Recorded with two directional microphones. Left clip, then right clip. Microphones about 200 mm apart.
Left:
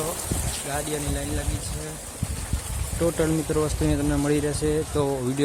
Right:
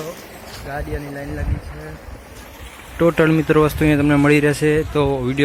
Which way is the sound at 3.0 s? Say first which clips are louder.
Right 9 dB; 25° right (ahead or behind).